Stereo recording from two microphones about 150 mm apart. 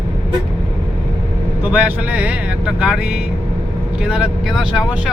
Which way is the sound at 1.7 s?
10° right (ahead or behind).